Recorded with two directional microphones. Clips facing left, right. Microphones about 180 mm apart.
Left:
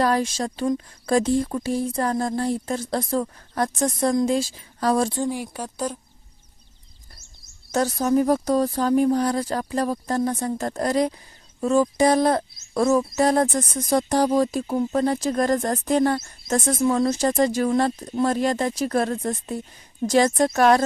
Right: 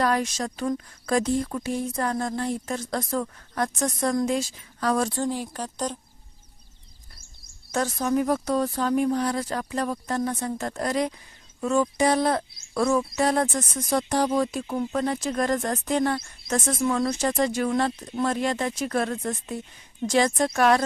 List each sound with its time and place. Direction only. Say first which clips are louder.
0.0 s speech: left 3 dB; 30° left (ahead or behind)
5.1 s a woman's voice: left 2 dB; 15° left (ahead or behind)
7.7 s speech: left 4 dB; 35° left (ahead or behind)